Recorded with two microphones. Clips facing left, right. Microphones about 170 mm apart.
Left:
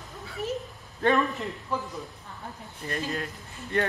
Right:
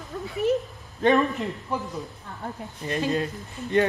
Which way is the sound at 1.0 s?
20° right (ahead or behind).